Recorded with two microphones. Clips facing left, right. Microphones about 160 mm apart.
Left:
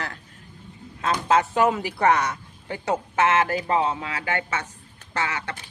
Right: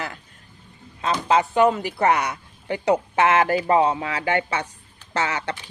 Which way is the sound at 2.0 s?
10° right (ahead or behind).